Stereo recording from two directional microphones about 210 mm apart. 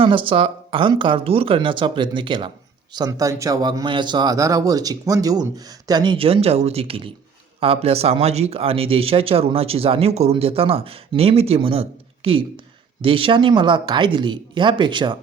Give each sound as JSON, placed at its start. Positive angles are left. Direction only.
{"t": 0.0, "sound": "speech", "side_deg": -25}